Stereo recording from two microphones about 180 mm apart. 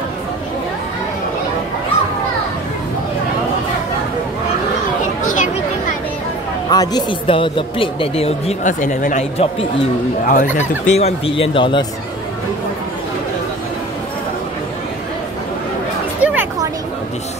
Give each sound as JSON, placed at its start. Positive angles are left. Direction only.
{"t": 5.2, "sound": "chatter", "side_deg": 45}
{"t": 6.7, "sound": "speech", "side_deg": 20}
{"t": 10.9, "sound": "speech", "side_deg": 35}
{"t": 16.2, "sound": "a sound", "side_deg": -10}